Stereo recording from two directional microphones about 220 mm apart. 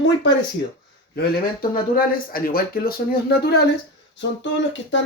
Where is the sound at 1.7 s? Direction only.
40° left (ahead or behind).